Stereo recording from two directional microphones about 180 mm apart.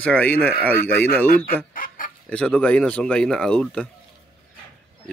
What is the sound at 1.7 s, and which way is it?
Chicken, 50° left (ahead or behind).